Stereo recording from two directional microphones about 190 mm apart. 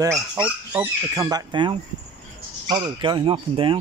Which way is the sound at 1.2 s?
20° right (ahead or behind).